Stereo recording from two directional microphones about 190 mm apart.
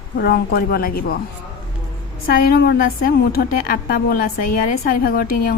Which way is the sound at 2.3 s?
50° left (ahead or behind).